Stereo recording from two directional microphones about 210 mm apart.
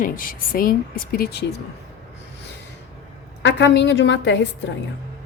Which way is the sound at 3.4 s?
55° left (ahead or behind).